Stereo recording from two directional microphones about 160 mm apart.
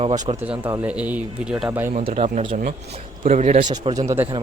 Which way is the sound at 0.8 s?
10° right (ahead or behind).